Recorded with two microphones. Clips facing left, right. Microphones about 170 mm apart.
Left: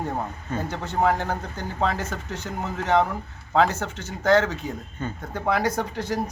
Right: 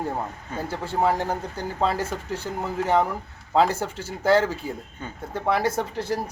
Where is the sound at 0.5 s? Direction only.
10° right (ahead or behind).